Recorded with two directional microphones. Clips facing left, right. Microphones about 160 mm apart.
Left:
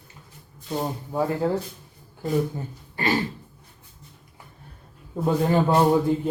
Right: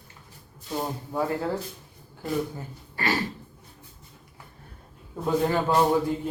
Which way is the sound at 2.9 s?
20° left (ahead or behind).